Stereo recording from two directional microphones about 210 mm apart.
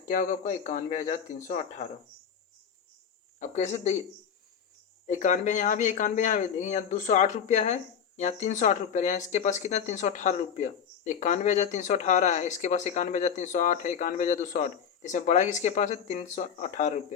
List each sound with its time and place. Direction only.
0.1 s speech: 35° left (ahead or behind)
3.4 s speech: 35° left (ahead or behind)
5.0 s speech: 35° left (ahead or behind)